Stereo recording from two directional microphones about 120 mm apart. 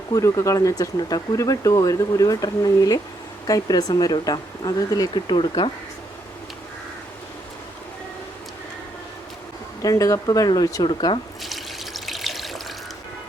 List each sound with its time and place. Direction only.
0.1 s speech: 25° left (ahead or behind); by 5.7 s 45° left (ahead or behind)
9.8 s speech: 30° left (ahead or behind)
11.4 s water: centre (ahead or behind)